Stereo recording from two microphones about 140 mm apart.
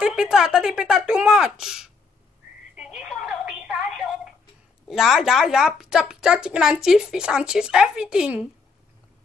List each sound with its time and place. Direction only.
0.0 s a woman's voice: 5° right (ahead or behind)
2.7 s telephone: 5° right (ahead or behind)
4.8 s a woman's voice: centre (ahead or behind)